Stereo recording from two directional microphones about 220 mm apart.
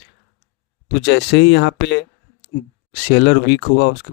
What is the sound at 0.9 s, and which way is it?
Speech, 50° left (ahead or behind).